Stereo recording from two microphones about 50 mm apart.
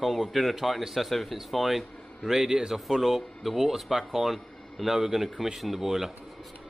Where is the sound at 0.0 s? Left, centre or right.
Centre.